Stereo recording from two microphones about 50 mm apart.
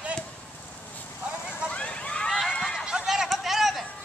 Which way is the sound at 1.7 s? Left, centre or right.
Left.